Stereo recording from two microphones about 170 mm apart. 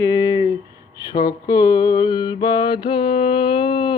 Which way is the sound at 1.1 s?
25° left (ahead or behind).